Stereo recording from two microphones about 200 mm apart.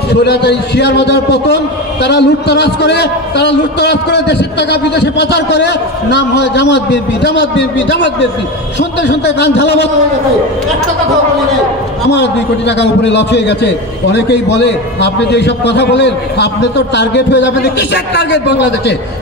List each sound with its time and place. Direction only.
0.1 s a man's voice: 55° left (ahead or behind)
12.1 s a man's voice: 60° left (ahead or behind)